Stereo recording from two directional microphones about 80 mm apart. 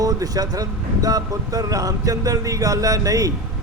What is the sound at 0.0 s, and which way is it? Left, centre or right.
Speech, right.